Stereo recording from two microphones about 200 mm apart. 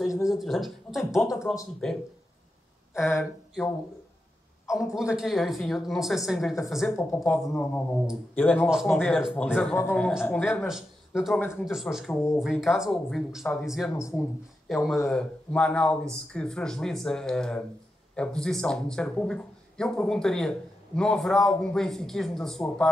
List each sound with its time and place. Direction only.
0.0 s speech: centre (ahead or behind)
4.6 s speech: centre (ahead or behind)
6.9 s speech: 15° left (ahead or behind)
10.7 s speech: centre (ahead or behind)
13.9 s speech: 15° left (ahead or behind)
14.7 s speech: centre (ahead or behind)